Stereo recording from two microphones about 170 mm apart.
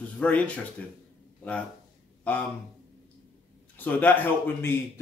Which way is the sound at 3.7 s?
10° left (ahead or behind).